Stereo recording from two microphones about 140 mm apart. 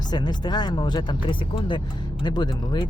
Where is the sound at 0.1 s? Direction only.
30° left (ahead or behind).